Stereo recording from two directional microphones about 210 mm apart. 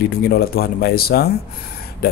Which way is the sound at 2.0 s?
45° left (ahead or behind).